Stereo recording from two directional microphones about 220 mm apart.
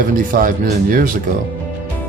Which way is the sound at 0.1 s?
40° right (ahead or behind).